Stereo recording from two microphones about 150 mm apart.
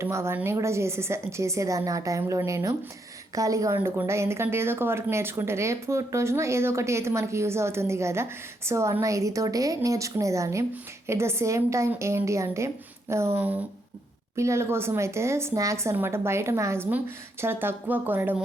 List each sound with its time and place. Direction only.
0.0 s a woman's voice: 15° right (ahead or behind)